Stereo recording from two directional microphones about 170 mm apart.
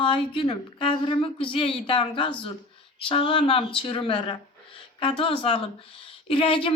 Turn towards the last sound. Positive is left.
turn(degrees=30)  # may be behind; listen again after turning